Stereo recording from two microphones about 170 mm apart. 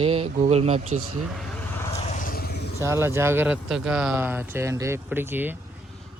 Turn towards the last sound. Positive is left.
turn(degrees=-10)  # may be behind; listen again after turning